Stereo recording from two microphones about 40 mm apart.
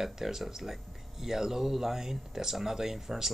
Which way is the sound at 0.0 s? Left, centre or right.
Centre.